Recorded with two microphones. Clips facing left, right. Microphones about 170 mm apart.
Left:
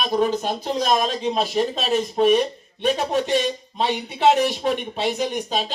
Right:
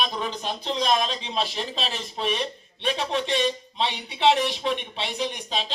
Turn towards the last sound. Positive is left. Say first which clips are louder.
# left 5 dB
turn(degrees=45)  # may be behind; listen again after turning